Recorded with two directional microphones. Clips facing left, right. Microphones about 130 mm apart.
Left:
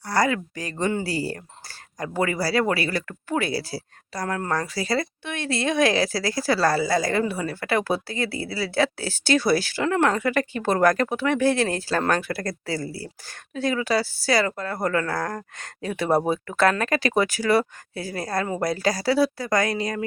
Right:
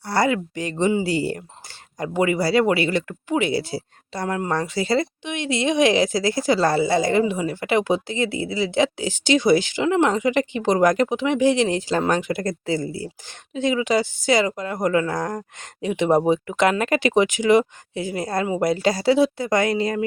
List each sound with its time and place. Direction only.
0.0 s speech: 25° right (ahead or behind)